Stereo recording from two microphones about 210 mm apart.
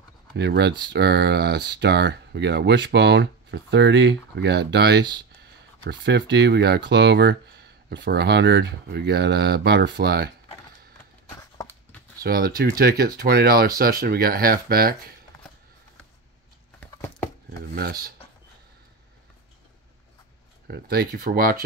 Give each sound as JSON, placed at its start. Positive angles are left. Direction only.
{"t": 0.3, "sound": "speech", "side_deg": -55}
{"t": 11.3, "sound": "a sound", "side_deg": 15}
{"t": 12.2, "sound": "speech", "side_deg": -45}
{"t": 17.5, "sound": "dishes", "side_deg": -45}
{"t": 20.6, "sound": "speech", "side_deg": -50}